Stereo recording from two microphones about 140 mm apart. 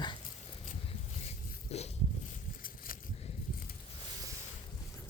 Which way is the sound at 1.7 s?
50° left (ahead or behind).